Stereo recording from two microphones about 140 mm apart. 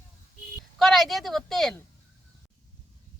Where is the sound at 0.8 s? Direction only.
Centre (ahead or behind).